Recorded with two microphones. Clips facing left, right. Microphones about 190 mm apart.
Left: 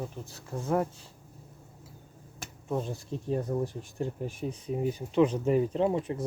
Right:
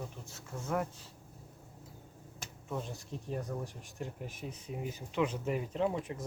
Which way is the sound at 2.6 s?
35° left (ahead or behind).